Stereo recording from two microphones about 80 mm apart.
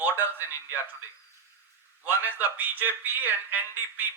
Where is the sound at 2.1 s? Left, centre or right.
Right.